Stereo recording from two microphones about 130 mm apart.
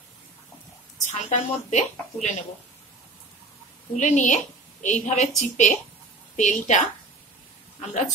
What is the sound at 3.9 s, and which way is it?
A woman's voice, 75° left (ahead or behind).